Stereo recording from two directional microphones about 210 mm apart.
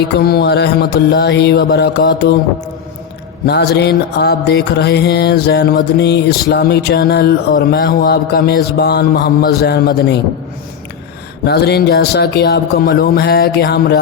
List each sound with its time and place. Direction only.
0.3 s speech: 50° left (ahead or behind)
3.4 s speech: 50° left (ahead or behind)
11.4 s speech: 50° left (ahead or behind)